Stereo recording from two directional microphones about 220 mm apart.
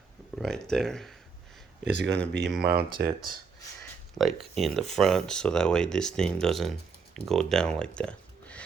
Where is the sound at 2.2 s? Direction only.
Centre (ahead or behind).